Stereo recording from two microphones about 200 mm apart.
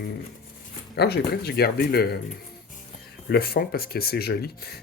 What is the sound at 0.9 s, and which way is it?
Speech, 55° left (ahead or behind).